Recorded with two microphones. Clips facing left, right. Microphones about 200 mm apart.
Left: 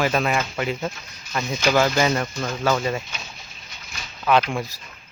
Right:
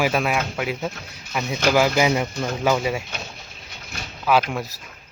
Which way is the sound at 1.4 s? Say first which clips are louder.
Right 2 dB; 60° right (ahead or behind).